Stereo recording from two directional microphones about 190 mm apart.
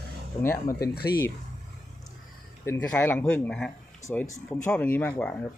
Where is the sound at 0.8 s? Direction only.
55° left (ahead or behind).